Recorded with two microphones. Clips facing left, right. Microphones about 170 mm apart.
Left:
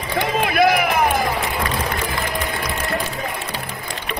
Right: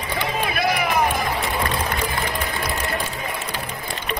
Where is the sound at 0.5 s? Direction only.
60° left (ahead or behind).